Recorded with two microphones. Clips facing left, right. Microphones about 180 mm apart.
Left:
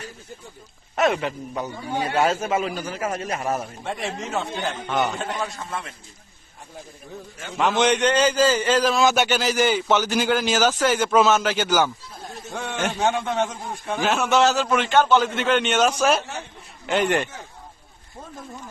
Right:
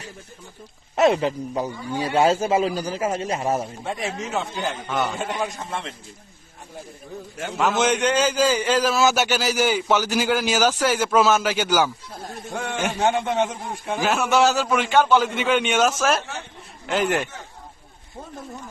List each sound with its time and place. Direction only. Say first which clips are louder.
0.9 s a man's voice: right 3 dB; 30° right (ahead or behind)
3.8 s a man's voice: right 1 dB; centre (ahead or behind)
7.5 s a man's voice: left 1 dB; 5° right (ahead or behind)